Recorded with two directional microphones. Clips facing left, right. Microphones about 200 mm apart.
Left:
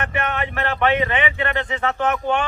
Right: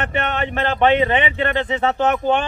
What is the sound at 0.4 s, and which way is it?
Speech, 30° right (ahead or behind).